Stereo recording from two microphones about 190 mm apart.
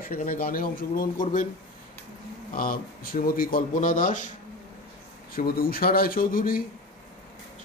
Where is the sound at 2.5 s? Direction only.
50° left (ahead or behind).